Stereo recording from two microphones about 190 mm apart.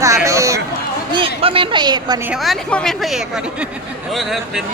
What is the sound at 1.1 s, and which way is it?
A woman's voice, 30° right (ahead or behind).